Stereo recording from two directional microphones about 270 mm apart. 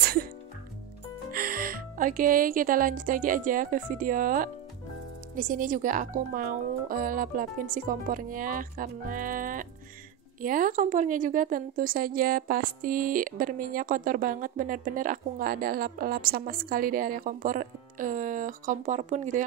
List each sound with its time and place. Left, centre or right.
0.0 s music: right
1.3 s a woman's voice: right